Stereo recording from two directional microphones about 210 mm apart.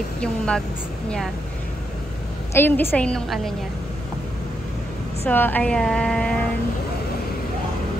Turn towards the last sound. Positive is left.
turn(degrees=5)  # may be behind; listen again after turning